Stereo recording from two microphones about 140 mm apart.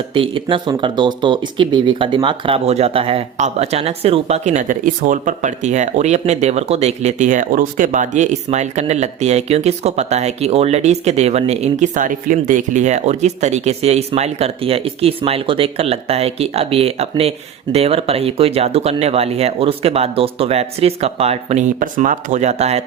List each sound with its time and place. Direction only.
0.1 s speech: 40° right (ahead or behind)
21.8 s speech: 70° right (ahead or behind); by 22.8 s 50° right (ahead or behind)